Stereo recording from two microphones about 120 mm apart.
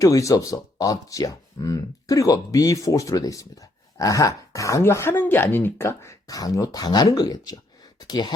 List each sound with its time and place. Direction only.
0.0 s speech: 25° left (ahead or behind)